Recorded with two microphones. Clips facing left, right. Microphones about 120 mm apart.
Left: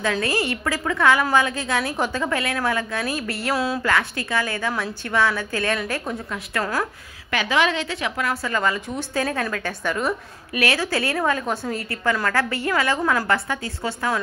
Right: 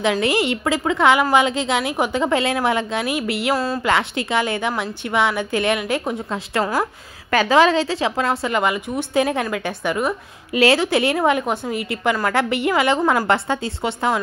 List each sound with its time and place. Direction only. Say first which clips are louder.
0.0 s a woman's voice: right 4 dB; 20° right (ahead or behind)
3.5 s speech: right 1 dB; centre (ahead or behind)
3.8 s a woman's voice: right 3 dB; 20° right (ahead or behind)
7.2 s a woman's voice: right 6 dB; 40° right (ahead or behind); by 10.6 s 15° right (ahead or behind)
10.6 s a woman's voice: right 7 dB; 25° right (ahead or behind)